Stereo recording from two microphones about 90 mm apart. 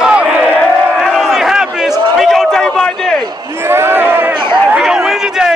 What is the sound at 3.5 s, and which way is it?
Speech, 25° right (ahead or behind).